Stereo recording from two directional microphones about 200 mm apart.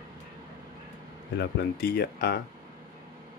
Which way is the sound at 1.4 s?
50° left (ahead or behind).